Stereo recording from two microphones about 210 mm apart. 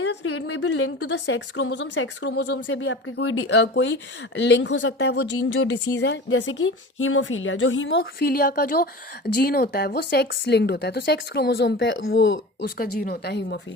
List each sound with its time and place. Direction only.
0.0 s a woman's voice: 60° left (ahead or behind)
12.1 s a woman's voice: 55° left (ahead or behind)